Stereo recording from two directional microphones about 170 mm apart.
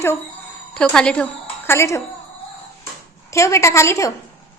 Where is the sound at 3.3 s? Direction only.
15° left (ahead or behind).